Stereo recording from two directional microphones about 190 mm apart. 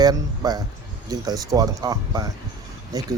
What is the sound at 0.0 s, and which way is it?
Speech, 20° right (ahead or behind).